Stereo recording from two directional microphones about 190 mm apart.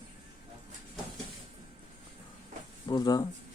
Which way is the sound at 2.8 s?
20° left (ahead or behind).